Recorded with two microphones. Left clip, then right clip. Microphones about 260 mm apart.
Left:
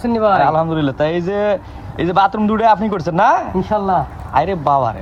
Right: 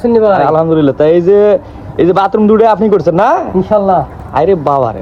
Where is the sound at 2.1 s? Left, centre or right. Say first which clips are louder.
Right 4 dB; left.